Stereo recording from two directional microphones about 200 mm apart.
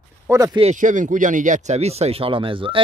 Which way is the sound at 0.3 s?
15° right (ahead or behind).